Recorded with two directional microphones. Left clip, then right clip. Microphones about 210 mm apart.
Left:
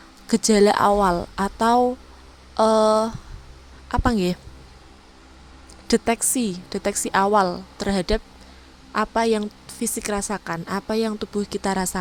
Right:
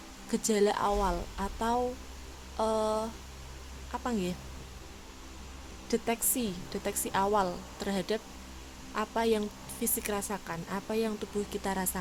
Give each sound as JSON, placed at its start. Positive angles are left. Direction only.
{"t": 0.3, "sound": "a woman's voice", "side_deg": 40}
{"t": 5.9, "sound": "a woman's voice", "side_deg": 50}